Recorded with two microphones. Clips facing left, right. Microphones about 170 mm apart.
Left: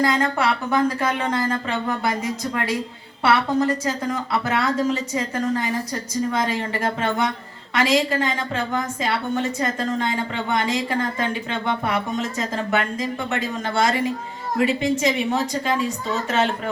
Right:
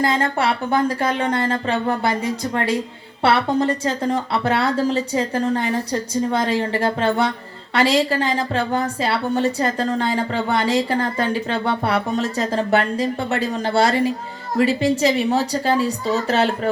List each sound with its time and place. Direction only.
0.0 s a woman's voice: 30° right (ahead or behind)